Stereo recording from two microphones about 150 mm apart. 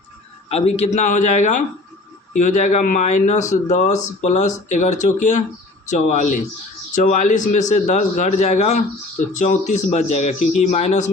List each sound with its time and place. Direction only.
0.4 s speech: 45° left (ahead or behind)